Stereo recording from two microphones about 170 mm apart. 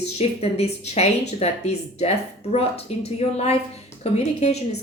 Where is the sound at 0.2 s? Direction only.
40° left (ahead or behind).